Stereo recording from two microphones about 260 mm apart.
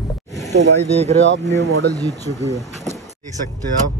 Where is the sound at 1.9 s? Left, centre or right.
Centre.